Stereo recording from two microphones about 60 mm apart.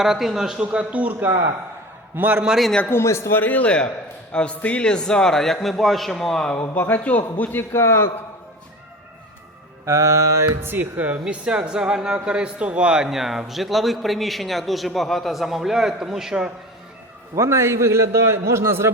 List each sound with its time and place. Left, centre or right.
0.0 s speech: centre; by 1.1 s right
2.1 s a man's voice: right
2.9 s a man's voice: left
3.4 s a man's voice: left
6.6 s a man's voice: left
7.7 s a man's voice: left
9.8 s mantra: right
10.6 s a woman's voice: right
11.4 s a man's voice: centre
17.3 s a man's voice: right